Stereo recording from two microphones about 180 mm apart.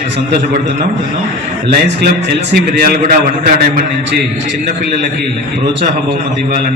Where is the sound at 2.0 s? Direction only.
60° right (ahead or behind).